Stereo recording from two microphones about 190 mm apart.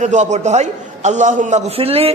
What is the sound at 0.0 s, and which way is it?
A man's voice, 40° right (ahead or behind).